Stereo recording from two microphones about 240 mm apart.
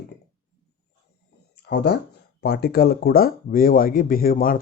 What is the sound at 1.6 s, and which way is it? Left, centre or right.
Speech, left.